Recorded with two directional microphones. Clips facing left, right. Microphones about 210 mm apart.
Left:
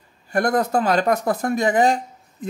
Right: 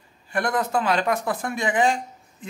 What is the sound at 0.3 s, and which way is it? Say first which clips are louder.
Speech: left 5 dB; 40° left (ahead or behind).